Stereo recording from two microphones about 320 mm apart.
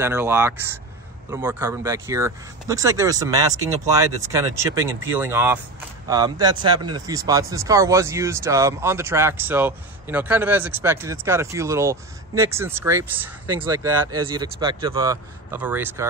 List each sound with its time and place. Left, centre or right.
0.0 s speech: centre